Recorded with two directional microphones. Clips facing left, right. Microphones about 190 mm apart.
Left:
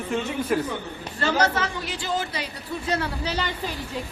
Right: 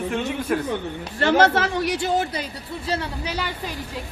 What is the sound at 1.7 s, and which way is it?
Speech, 70° right (ahead or behind).